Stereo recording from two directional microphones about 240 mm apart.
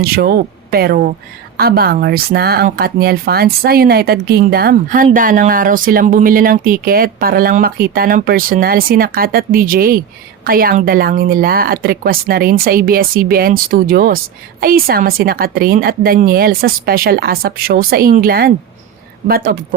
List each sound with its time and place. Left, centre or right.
0.0 s speech: right